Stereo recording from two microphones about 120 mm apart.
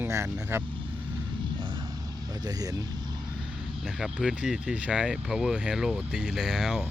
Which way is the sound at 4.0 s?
5° right (ahead or behind).